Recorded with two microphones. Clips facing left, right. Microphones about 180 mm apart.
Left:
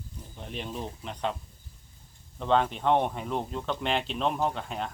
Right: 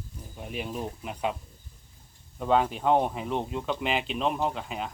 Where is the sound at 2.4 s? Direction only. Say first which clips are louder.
Right 1 dB; 5° right (ahead or behind).